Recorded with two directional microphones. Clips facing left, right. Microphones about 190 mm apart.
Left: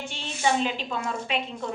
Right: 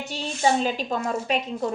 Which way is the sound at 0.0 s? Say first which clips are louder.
Right 4 dB; 40° right (ahead or behind).